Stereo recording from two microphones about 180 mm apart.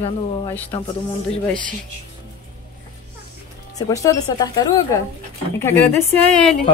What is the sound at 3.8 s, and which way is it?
Speech, 20° left (ahead or behind).